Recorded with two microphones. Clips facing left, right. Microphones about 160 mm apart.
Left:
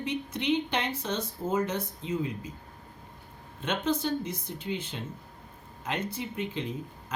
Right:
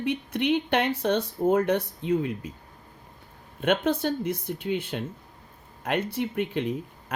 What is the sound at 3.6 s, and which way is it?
Speech, 60° right (ahead or behind).